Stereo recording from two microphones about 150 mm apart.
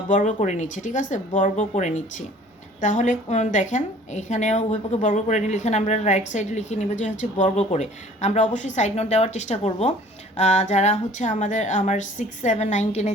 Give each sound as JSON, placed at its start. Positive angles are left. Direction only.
{"t": 0.1, "sound": "a woman's voice", "side_deg": 60}